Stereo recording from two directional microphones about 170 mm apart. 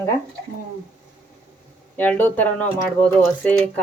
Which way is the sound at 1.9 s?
10° left (ahead or behind).